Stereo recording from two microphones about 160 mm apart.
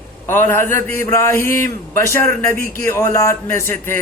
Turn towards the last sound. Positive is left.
turn(degrees=15)  # may be behind; listen again after turning